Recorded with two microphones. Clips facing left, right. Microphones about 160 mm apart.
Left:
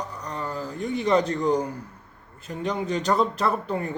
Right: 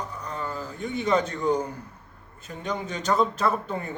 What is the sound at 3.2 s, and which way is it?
Speech, 10° left (ahead or behind).